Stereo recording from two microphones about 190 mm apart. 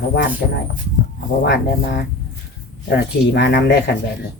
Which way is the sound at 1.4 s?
60° left (ahead or behind).